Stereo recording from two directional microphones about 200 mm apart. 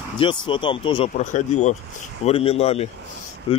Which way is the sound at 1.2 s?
35° left (ahead or behind).